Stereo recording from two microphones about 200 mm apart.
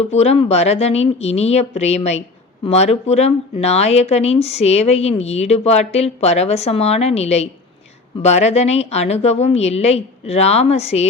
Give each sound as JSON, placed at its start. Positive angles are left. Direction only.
{"t": 0.0, "sound": "speech", "side_deg": 30}